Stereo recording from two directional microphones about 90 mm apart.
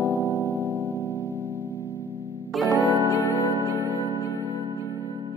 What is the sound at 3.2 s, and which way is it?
Music, 25° left (ahead or behind).